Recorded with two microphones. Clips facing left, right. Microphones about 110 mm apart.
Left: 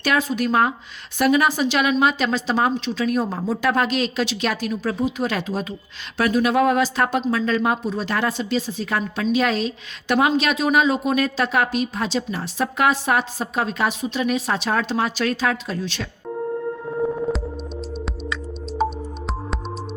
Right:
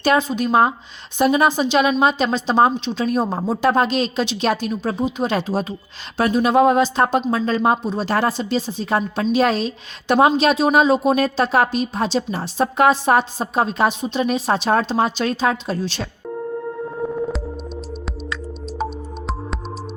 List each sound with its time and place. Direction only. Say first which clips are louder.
0.0 s a woman's voice: right 3 dB; 25° right (ahead or behind)